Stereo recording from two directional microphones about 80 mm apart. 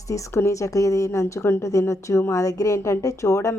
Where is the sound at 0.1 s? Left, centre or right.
Left.